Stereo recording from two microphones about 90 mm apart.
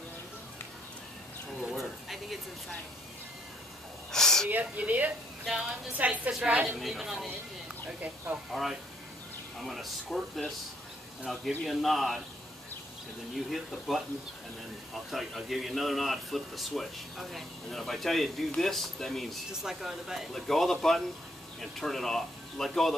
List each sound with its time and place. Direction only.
1.6 s a sound: centre (ahead or behind)
4.1 s a sound: 5° left (ahead or behind)
4.5 s speech: 20° right (ahead or behind)
6.8 s a man's voice: 5° right (ahead or behind)
7.2 s speech: 15° right (ahead or behind)
8.5 s a man's voice: centre (ahead or behind)
13.5 s a man's voice: centre (ahead or behind)
15.0 s a man's voice: centre (ahead or behind)